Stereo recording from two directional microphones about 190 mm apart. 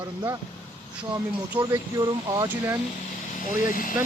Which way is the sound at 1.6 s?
20° right (ahead or behind).